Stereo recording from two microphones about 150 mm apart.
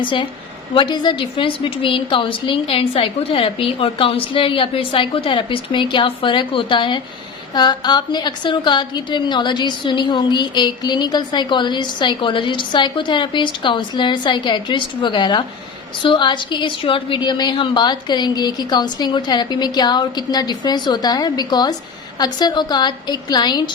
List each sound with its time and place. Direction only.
0.0 s a woman's voice: 35° left (ahead or behind)